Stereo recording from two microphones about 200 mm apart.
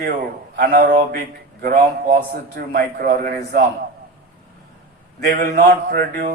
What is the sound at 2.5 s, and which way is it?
Mantra, 50° right (ahead or behind).